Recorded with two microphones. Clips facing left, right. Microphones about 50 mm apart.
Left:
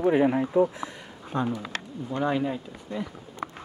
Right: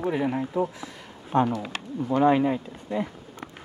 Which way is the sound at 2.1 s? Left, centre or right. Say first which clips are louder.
Right 6 dB; right.